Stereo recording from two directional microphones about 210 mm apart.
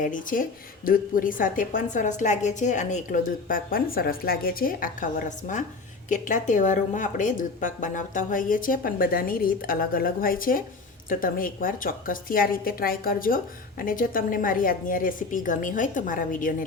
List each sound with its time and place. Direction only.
0.0 s a woman's voice: 40° left (ahead or behind)